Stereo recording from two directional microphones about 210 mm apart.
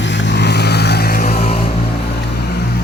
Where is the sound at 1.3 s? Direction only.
30° left (ahead or behind).